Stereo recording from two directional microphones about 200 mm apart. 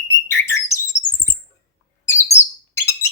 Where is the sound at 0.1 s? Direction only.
15° left (ahead or behind).